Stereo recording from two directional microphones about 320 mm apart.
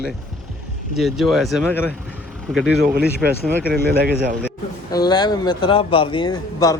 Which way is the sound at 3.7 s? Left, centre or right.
Right.